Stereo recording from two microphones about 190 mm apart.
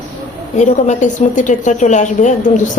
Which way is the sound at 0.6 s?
40° left (ahead or behind).